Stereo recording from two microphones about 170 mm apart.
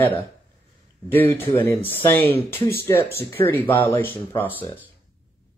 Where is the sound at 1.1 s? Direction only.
10° left (ahead or behind).